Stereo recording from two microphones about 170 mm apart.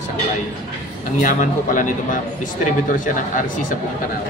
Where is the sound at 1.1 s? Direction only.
50° left (ahead or behind).